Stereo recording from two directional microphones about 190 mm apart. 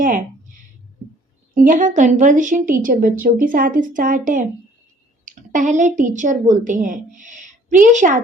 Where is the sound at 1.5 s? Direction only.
45° right (ahead or behind).